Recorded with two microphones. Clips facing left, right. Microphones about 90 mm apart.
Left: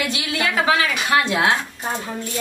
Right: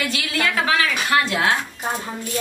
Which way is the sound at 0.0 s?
20° left (ahead or behind).